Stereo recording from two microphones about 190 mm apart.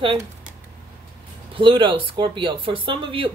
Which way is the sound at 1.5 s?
25° right (ahead or behind).